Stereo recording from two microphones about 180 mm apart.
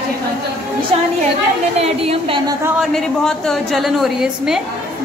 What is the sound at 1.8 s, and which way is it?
Speech, 30° right (ahead or behind).